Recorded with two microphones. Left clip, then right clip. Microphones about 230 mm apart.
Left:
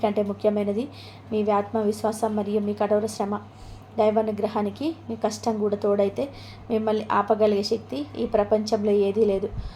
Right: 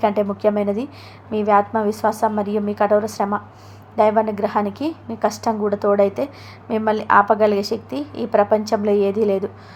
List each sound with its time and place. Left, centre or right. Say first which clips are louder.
0.0 s a woman's voice: right 5 dB; centre